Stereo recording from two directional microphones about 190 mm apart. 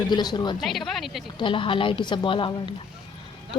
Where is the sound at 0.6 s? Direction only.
Centre (ahead or behind).